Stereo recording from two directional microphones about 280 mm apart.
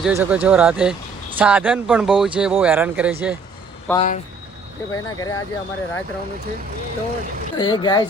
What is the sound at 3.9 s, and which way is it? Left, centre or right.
Speech, left.